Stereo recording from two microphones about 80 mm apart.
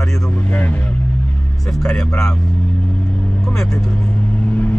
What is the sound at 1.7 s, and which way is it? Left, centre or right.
Speech, centre.